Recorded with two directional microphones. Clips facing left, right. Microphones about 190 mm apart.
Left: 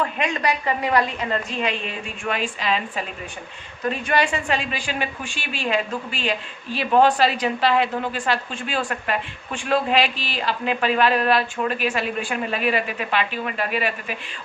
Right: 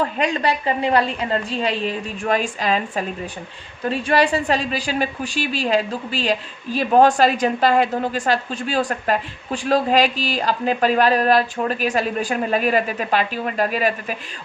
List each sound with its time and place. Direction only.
0.0 s a woman's voice: 35° right (ahead or behind)
3.8 s a woman's voice: 35° right (ahead or behind)